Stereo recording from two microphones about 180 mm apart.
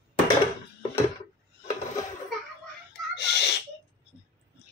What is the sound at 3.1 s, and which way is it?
Whimper, 70° left (ahead or behind).